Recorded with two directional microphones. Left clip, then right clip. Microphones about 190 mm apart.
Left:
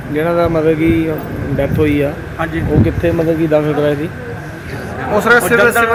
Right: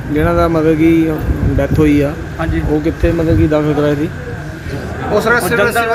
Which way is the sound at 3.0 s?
10° left (ahead or behind).